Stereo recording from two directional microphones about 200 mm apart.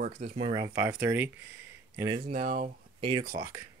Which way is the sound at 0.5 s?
15° right (ahead or behind).